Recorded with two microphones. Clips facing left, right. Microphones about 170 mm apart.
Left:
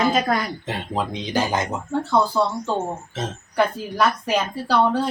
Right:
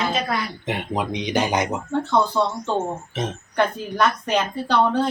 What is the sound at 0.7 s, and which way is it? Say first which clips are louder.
Speech: right 3 dB; 15° right (ahead or behind).